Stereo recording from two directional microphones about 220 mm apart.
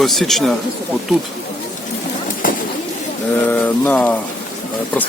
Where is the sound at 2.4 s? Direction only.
40° left (ahead or behind).